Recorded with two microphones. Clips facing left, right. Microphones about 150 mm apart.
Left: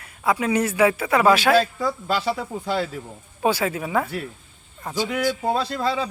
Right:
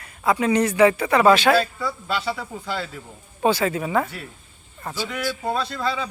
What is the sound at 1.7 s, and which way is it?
Speech, 35° left (ahead or behind).